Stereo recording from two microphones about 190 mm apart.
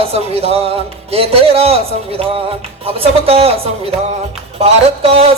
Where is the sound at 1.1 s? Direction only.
30° right (ahead or behind).